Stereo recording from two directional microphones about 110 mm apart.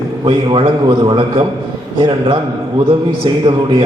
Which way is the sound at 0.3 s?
50° right (ahead or behind).